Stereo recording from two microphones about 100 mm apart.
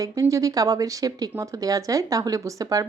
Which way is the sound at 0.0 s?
35° right (ahead or behind).